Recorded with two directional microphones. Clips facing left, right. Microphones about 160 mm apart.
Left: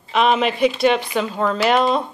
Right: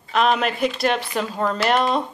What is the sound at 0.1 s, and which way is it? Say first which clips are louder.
A woman's voice: left 2 dB; centre (ahead or behind).